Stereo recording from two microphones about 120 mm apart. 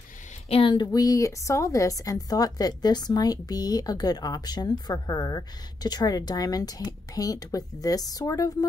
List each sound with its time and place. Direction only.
0.5 s speech: 45° left (ahead or behind)
0.9 s speech: 30° left (ahead or behind)